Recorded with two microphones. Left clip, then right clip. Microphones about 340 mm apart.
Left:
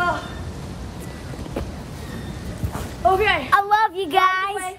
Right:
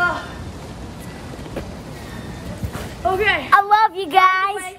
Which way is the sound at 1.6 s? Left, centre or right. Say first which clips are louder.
Left 1 dB; centre.